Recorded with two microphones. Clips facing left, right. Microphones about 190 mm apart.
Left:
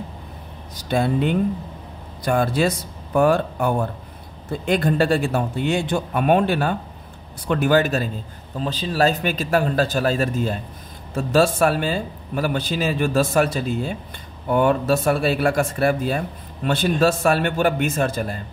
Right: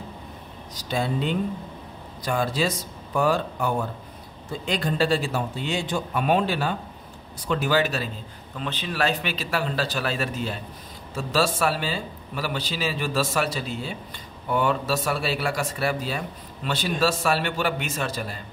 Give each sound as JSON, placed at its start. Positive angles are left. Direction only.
{"t": 0.7, "sound": "a man's voice", "side_deg": 55}
{"t": 8.5, "sound": "a man's voice", "side_deg": 35}